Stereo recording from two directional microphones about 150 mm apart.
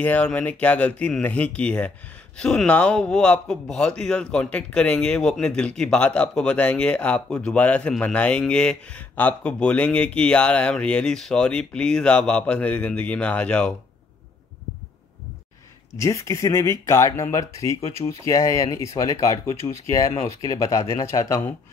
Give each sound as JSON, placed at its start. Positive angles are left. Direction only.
{"t": 0.0, "sound": "speech", "side_deg": 10}
{"t": 16.0, "sound": "speech", "side_deg": 20}